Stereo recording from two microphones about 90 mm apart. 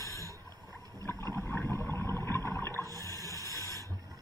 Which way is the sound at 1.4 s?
15° left (ahead or behind).